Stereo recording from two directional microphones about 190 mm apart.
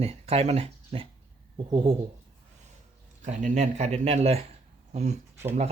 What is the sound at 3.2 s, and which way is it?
Speech, 40° right (ahead or behind).